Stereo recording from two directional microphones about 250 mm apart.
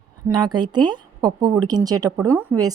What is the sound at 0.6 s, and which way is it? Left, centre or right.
Speech, centre.